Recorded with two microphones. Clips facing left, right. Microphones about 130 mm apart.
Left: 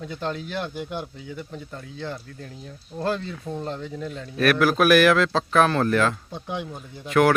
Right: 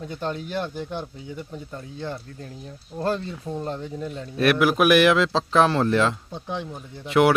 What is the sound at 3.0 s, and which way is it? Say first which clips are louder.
Speech: right 1 dB; 35° right (ahead or behind).